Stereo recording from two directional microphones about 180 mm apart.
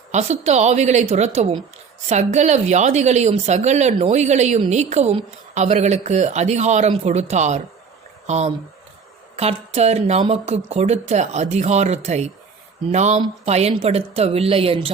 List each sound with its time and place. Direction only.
0.1 s speech: 40° right (ahead or behind)